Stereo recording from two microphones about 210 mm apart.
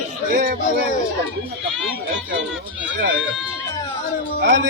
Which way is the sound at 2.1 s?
55° right (ahead or behind).